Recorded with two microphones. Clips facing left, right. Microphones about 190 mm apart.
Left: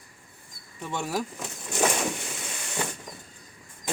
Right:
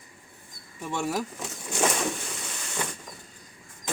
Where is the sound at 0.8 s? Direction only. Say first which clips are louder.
Right 1 dB; centre (ahead or behind).